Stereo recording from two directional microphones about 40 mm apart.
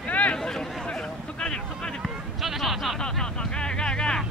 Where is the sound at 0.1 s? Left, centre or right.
Left.